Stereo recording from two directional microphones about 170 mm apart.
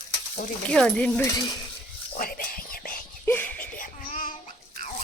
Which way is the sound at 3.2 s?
10° left (ahead or behind).